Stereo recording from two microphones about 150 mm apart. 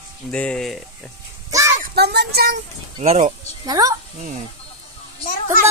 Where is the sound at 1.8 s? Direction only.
90° right.